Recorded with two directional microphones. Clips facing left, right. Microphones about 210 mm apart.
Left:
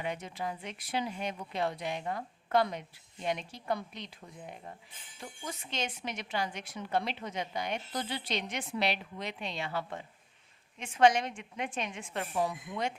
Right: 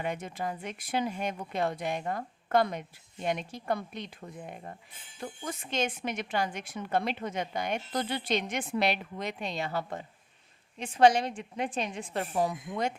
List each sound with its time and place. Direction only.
0.0 s a woman's voice: 50° right (ahead or behind)